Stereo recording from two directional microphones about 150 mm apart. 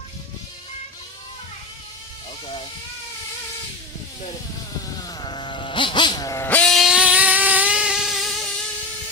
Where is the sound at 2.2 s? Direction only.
40° left (ahead or behind).